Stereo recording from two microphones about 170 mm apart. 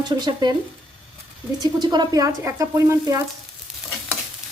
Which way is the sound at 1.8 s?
25° right (ahead or behind).